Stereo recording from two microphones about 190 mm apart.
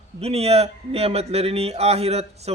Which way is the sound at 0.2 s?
35° right (ahead or behind).